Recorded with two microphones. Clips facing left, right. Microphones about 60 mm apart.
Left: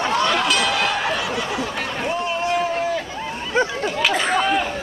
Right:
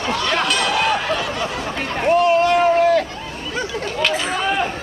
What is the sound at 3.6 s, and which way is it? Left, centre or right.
Chatter, left.